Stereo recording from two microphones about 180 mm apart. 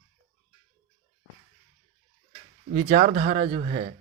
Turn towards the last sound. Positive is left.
turn(degrees=-35)  # may be behind; listen again after turning